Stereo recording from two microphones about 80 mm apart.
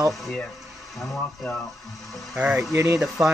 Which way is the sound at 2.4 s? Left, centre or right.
Centre.